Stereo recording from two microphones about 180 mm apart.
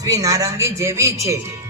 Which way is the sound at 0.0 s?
20° right (ahead or behind).